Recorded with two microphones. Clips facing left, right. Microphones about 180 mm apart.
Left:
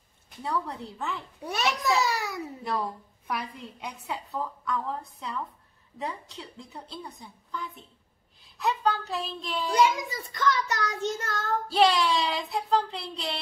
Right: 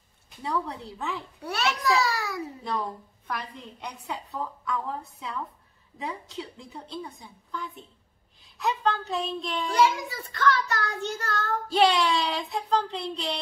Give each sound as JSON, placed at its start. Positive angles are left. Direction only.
{"t": 0.4, "sound": "a woman's voice", "side_deg": 0}
{"t": 1.4, "sound": "a child's voice", "side_deg": 15}
{"t": 3.3, "sound": "a woman's voice", "side_deg": 5}
{"t": 9.8, "sound": "a child's voice", "side_deg": 15}
{"t": 11.7, "sound": "a woman's voice", "side_deg": 0}